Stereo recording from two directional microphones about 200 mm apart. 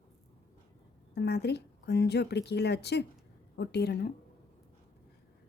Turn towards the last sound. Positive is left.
turn(degrees=55)  # may be behind; listen again after turning